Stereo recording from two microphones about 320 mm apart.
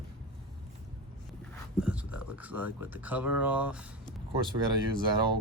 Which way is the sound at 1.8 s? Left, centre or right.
Centre.